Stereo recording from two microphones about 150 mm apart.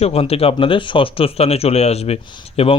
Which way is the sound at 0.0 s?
40° left (ahead or behind).